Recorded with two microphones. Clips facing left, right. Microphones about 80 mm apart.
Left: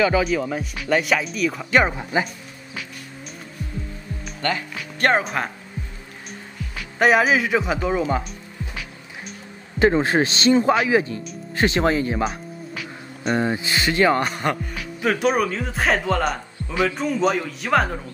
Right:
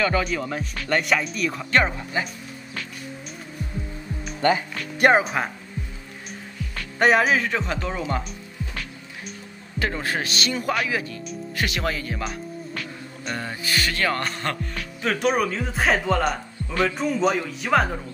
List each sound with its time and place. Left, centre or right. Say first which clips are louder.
0.0 s speech: left 4 dB; centre
4.4 s speech: right 4 dB; centre
6.8 s speech: left 2 dB; centre
8.0 s music: left 4 dB; centre
9.8 s a man's voice: left 9 dB; left
12.3 s music: even; centre
13.4 s speech: left 1 dB; left; by 18.0 s centre